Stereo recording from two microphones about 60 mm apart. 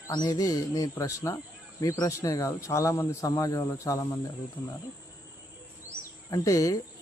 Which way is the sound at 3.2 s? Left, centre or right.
Left.